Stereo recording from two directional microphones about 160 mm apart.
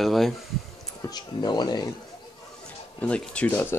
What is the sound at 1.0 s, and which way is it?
Speech, 25° left (ahead or behind).